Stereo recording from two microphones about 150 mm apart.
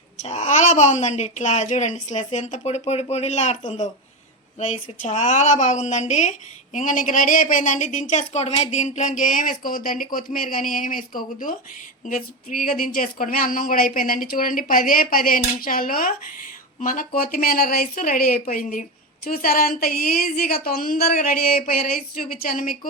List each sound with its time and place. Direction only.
0.2 s a woman's voice: 50° left (ahead or behind); by 22.9 s 70° left (ahead or behind)